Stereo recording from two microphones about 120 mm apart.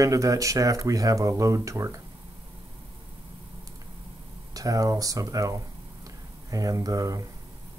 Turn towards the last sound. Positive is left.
turn(degrees=-30)  # may be behind; listen again after turning